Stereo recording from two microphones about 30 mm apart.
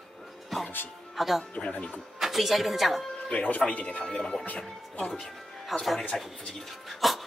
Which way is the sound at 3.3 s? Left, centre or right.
Left.